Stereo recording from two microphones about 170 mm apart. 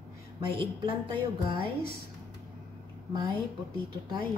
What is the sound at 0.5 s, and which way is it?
A woman's voice, 30° right (ahead or behind).